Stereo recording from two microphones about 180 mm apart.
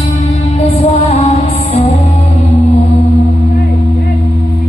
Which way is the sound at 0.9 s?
35° left (ahead or behind).